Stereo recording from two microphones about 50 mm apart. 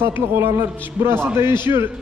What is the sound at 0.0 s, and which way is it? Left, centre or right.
A man's voice, right.